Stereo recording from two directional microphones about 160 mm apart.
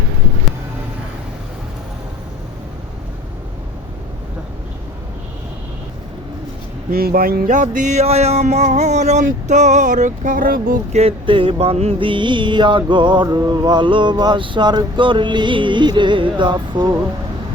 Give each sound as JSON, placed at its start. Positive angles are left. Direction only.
{"t": 6.9, "sound": "music", "side_deg": -70}
{"t": 9.2, "sound": "speech", "side_deg": -50}
{"t": 10.9, "sound": "mantra", "side_deg": -35}